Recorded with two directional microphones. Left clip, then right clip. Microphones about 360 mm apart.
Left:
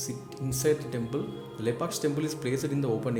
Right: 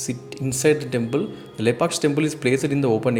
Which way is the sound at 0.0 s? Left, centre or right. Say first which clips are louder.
Right 8 dB; left.